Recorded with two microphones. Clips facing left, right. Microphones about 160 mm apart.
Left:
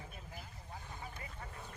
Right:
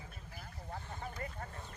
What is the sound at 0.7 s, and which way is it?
Vehicle, 55° right (ahead or behind).